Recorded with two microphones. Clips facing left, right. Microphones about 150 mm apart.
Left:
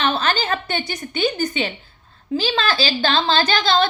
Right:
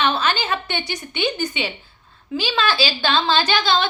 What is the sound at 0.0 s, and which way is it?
A woman's voice, 50° left (ahead or behind).